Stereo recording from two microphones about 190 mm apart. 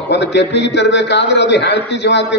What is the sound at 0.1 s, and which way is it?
A man's voice, 65° left (ahead or behind).